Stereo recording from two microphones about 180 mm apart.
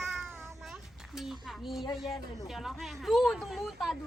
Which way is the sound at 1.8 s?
25° left (ahead or behind).